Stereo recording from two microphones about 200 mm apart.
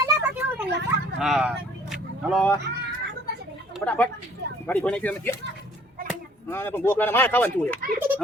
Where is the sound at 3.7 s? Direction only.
5° left (ahead or behind).